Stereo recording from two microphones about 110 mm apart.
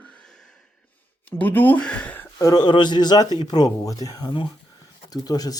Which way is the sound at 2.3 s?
35° left (ahead or behind).